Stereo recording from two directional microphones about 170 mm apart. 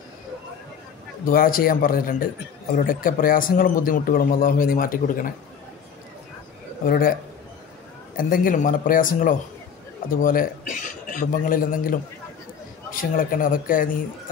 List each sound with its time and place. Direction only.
1.2 s a man's voice: 55° left (ahead or behind)
6.8 s a man's voice: 55° left (ahead or behind)
8.2 s a man's voice: 55° left (ahead or behind)
13.1 s a man's voice: 55° left (ahead or behind)